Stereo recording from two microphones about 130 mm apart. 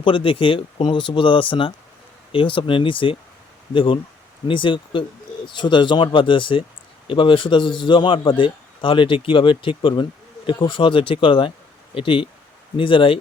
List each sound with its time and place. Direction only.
0.0 s speech: 45° left (ahead or behind)